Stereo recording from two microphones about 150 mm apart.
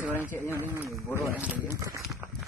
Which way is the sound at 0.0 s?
10° right (ahead or behind).